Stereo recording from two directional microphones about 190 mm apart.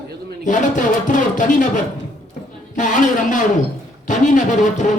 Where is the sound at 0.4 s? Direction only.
40° left (ahead or behind).